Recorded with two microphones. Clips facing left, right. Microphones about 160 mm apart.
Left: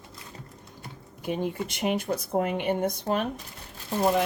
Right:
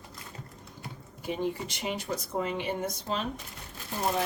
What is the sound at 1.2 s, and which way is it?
Speech, 55° left (ahead or behind).